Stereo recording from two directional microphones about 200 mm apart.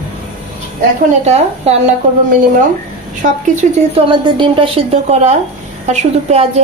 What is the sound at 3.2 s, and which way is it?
A woman's voice, 35° right (ahead or behind).